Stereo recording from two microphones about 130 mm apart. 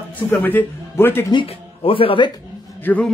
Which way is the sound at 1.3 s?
45° left (ahead or behind).